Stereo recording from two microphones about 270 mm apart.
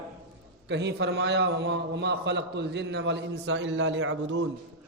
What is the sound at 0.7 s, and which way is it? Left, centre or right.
A man's voice, right.